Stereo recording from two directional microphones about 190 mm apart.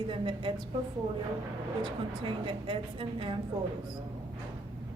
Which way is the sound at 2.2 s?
25° right (ahead or behind).